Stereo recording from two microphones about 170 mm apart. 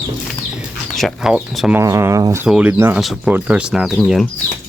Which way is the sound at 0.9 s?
Centre (ahead or behind).